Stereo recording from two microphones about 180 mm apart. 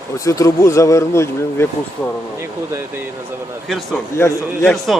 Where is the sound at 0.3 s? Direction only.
15° left (ahead or behind).